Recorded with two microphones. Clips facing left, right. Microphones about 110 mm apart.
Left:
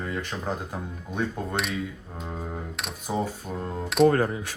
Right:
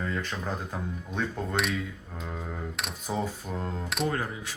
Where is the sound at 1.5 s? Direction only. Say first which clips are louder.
Even; centre (ahead or behind).